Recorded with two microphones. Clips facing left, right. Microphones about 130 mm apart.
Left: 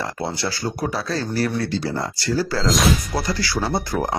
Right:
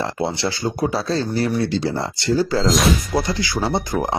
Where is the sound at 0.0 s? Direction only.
20° right (ahead or behind).